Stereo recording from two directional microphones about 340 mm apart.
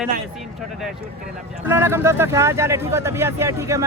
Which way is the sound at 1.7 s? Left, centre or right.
Centre.